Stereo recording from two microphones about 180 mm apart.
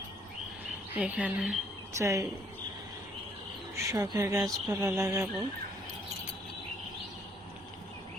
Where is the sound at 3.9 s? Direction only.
20° right (ahead or behind).